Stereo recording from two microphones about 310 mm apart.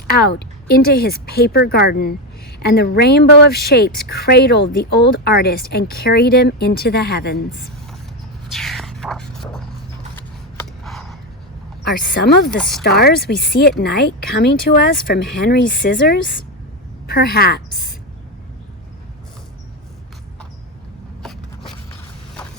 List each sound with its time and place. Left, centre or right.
0.1 s a woman's voice: left
8.5 s a sound: centre
10.8 s a sound: centre
11.8 s a woman's voice: left
12.5 s speech: centre
12.8 s a woman's voice: left